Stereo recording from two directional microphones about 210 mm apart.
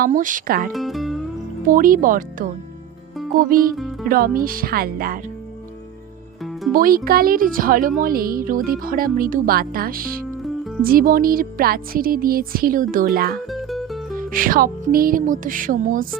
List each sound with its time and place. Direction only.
0.0 s music: 40° right (ahead or behind)
0.7 s music: centre (ahead or behind)
1.6 s music: 40° right (ahead or behind)
3.3 s speech: 45° right (ahead or behind)
6.4 s music: centre (ahead or behind)
6.7 s speech: 45° right (ahead or behind)
10.4 s music: centre (ahead or behind)
10.8 s speech: 45° right (ahead or behind)
13.5 s music: centre (ahead or behind)
14.2 s music: 40° right (ahead or behind)